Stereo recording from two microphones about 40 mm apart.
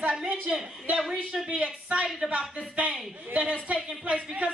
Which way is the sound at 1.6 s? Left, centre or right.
Right.